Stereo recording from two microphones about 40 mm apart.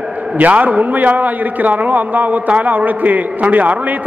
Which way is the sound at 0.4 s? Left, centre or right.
Right.